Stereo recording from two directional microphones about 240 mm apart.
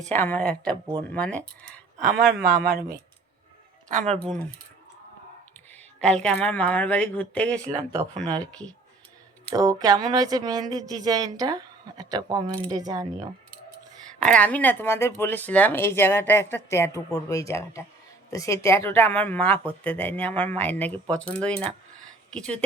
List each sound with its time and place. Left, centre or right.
0.1 s speech: centre
2.4 s a woman's voice: centre
2.6 s speech: right
4.2 s speech: centre
5.7 s speech: centre
7.8 s speech: right
8.4 s speech: centre
9.6 s a woman's voice: centre
14.2 s speech: centre